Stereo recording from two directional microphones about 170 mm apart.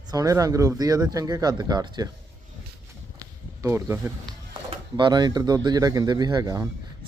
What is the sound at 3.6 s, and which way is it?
Speech, 15° right (ahead or behind).